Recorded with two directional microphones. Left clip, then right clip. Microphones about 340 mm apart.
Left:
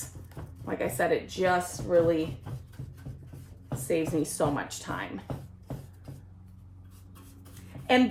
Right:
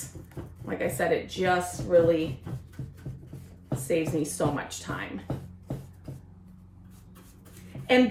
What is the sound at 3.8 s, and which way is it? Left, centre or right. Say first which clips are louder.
Speech: right 1 dB; centre.